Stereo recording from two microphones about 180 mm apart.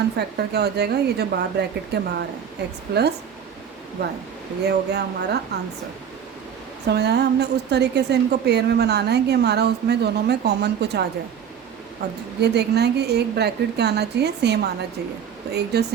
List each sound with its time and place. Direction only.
0.2 s speech: 65° right (ahead or behind)
4.6 s speech: 65° right (ahead or behind)
6.8 s a woman's voice: 65° right (ahead or behind)
12.4 s a woman's voice: 65° right (ahead or behind)